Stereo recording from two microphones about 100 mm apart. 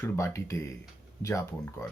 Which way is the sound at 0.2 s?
30° left (ahead or behind).